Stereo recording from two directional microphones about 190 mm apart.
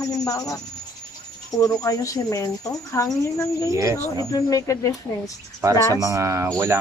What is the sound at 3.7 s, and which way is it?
Speech, 15° right (ahead or behind).